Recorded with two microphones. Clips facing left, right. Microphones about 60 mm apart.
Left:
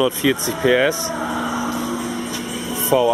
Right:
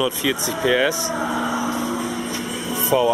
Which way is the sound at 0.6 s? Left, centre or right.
Left.